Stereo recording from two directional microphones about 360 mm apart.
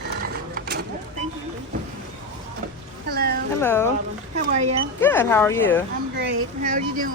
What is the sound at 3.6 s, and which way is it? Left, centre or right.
Speech, centre.